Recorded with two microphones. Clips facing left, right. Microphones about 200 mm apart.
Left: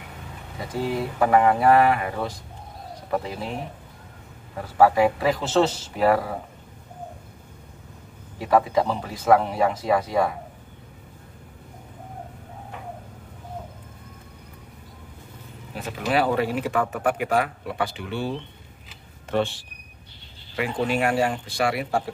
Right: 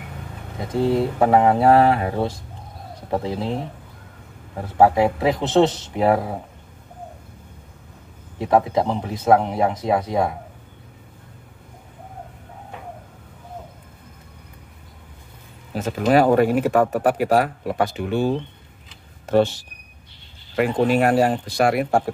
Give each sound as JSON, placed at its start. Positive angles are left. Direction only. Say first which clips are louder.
{"t": 0.7, "sound": "speech", "louder": "right 6 dB", "side_deg": -25}
{"t": 4.7, "sound": "speech", "louder": "right 2 dB", "side_deg": -25}
{"t": 8.4, "sound": "speech", "louder": "right 2 dB", "side_deg": -20}
{"t": 15.7, "sound": "speech", "louder": "right 7 dB", "side_deg": -45}